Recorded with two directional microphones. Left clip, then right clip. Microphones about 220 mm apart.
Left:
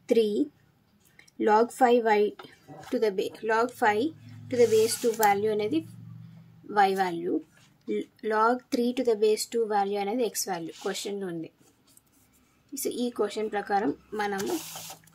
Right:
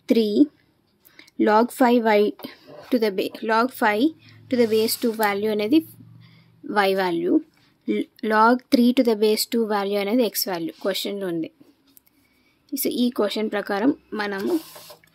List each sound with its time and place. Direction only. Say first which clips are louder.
0.1 s speech: right 5 dB; 40° right (ahead or behind)
12.8 s speech: right 6 dB; 40° right (ahead or behind)